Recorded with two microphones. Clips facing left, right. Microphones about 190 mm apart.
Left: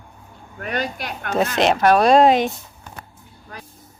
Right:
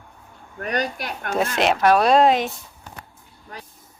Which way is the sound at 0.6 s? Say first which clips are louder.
Right 1 dB; 40° right (ahead or behind).